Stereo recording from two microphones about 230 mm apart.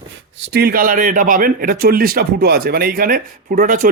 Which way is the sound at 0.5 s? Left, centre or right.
Right.